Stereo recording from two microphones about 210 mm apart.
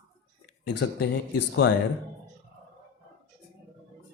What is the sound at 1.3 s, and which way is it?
Speech, 55° left (ahead or behind).